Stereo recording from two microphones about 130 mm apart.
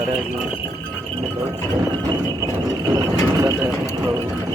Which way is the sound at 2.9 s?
25° right (ahead or behind).